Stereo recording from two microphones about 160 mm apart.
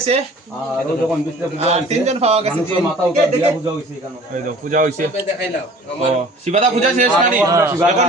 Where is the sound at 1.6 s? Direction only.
40° right (ahead or behind).